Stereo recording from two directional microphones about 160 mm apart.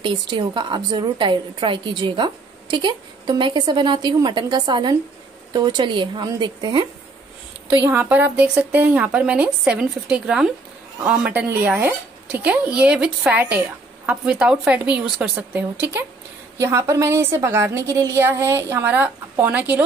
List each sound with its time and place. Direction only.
0.0 s a woman's voice: 30° right (ahead or behind)
7.7 s speech: 10° right (ahead or behind)